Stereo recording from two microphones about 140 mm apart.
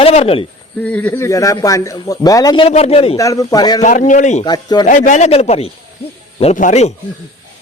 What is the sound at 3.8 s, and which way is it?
Speech, 65° left (ahead or behind).